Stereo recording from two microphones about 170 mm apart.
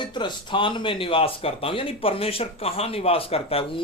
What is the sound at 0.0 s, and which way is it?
Speech, 30° left (ahead or behind).